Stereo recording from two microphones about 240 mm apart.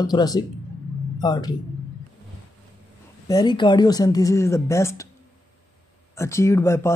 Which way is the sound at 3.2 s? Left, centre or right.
Centre.